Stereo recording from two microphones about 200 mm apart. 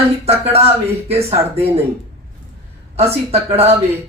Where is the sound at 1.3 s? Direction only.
30° right (ahead or behind).